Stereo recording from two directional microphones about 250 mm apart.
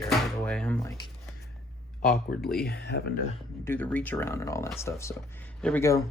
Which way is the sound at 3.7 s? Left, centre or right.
Centre.